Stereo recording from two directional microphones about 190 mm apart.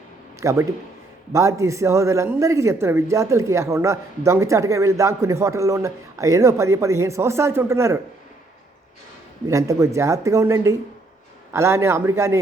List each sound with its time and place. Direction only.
0.3 s a man's voice: 15° right (ahead or behind)
9.5 s a man's voice: 15° right (ahead or behind)